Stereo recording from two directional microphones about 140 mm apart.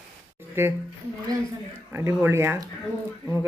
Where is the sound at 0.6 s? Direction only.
15° right (ahead or behind).